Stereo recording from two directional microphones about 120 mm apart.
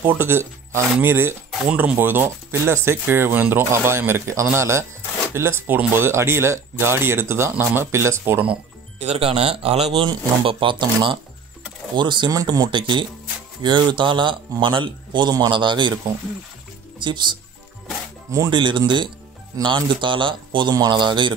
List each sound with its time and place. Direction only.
0.0 s speech: 15° right (ahead or behind)
9.0 s speech: 55° right (ahead or behind)
10.0 s speech: 45° right (ahead or behind)
17.0 s speech: 40° right (ahead or behind)
18.5 s speech: 40° right (ahead or behind)